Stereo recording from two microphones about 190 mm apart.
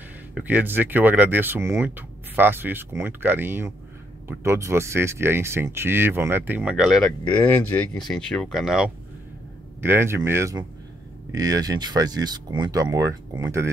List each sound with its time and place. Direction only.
0.3 s speech: 10° right (ahead or behind)